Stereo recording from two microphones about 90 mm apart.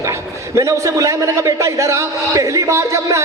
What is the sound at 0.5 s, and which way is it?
A man's voice, 35° right (ahead or behind).